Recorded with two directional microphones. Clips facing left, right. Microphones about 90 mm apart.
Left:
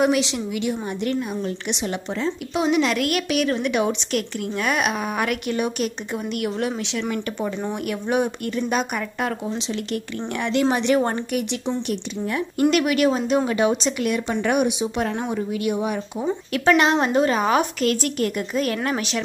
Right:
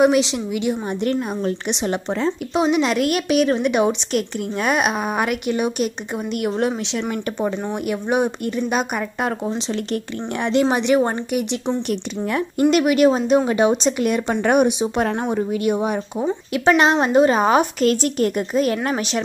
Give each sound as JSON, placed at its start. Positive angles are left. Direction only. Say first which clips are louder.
{"t": 0.0, "sound": "a woman's voice", "louder": "right 4 dB", "side_deg": -20}
{"t": 6.4, "sound": "speech", "louder": "right 6 dB", "side_deg": -30}
{"t": 7.9, "sound": "a woman's voice", "louder": "right 3 dB", "side_deg": -20}
{"t": 10.4, "sound": "a woman's voice", "louder": "right 3 dB", "side_deg": -25}
{"t": 10.8, "sound": "a woman's voice", "louder": "right 2 dB", "side_deg": -10}
{"t": 16.3, "sound": "a woman's voice", "louder": "right 1 dB", "side_deg": -20}